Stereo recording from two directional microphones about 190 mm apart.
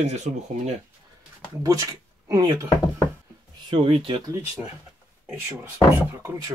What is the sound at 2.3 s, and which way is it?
Speech, 20° right (ahead or behind).